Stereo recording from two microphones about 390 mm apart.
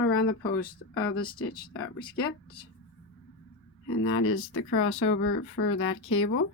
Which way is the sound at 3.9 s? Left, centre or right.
Left.